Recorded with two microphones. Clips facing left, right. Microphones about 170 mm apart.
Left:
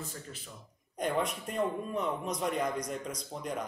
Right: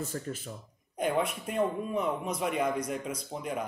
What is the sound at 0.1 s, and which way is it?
Speech, 50° right (ahead or behind).